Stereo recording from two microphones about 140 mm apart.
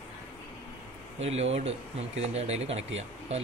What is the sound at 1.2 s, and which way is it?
Speech, 50° right (ahead or behind).